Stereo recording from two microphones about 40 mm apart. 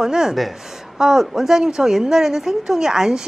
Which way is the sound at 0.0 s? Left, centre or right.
Centre.